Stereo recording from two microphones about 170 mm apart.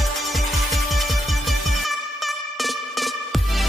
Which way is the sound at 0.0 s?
Centre (ahead or behind).